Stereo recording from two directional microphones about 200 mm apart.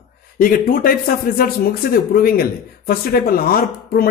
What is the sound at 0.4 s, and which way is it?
Speech, 45° left (ahead or behind).